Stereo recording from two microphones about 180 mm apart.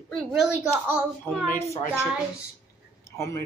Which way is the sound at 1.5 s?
15° left (ahead or behind).